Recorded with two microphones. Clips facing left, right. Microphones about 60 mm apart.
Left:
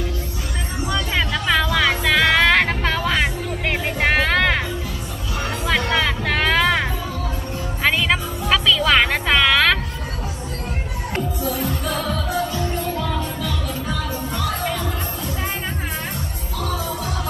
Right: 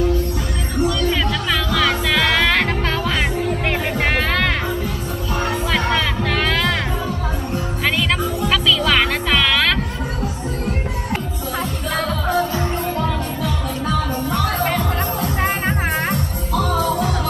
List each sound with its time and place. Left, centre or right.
0.8 s music: centre
5.7 s music: centre
8.5 s music: centre
11.9 s music: right
14.3 s music: right